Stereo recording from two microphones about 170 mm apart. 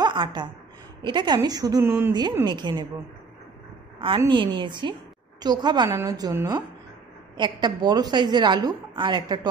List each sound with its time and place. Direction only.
0.0 s a woman's voice: 25° right (ahead or behind)
2.4 s a woman's voice: 25° right (ahead or behind)
4.3 s a woman's voice: 25° right (ahead or behind)
7.3 s a woman's voice: 25° right (ahead or behind)